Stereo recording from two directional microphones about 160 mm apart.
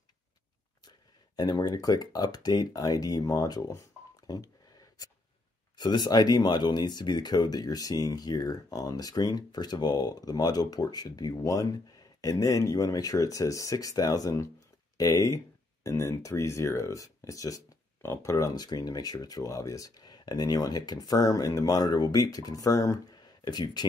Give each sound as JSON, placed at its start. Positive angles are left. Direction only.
{"t": 0.8, "sound": "speech", "side_deg": 25}
{"t": 5.8, "sound": "speech", "side_deg": 25}